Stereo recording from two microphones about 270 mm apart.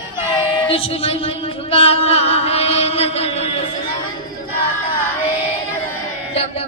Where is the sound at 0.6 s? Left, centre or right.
Centre.